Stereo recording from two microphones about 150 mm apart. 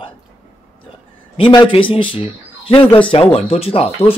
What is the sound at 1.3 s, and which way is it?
Speech, 35° left (ahead or behind).